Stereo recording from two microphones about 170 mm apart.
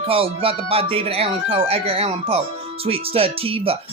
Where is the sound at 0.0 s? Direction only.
35° right (ahead or behind).